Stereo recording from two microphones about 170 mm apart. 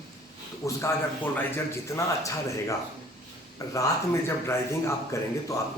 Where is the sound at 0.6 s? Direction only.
20° left (ahead or behind).